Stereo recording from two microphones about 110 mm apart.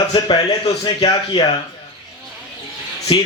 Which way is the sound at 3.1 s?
50° left (ahead or behind).